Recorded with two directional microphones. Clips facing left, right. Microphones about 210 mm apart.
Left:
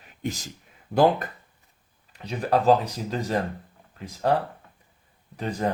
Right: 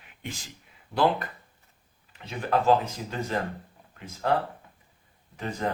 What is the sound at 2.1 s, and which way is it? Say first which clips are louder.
Speech: left 3 dB; 35° left (ahead or behind).